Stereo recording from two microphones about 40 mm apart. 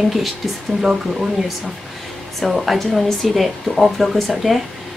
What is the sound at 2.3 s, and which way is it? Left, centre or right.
A woman's voice, centre.